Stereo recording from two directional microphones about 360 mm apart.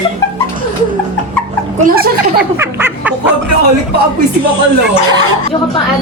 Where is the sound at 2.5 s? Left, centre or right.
Centre.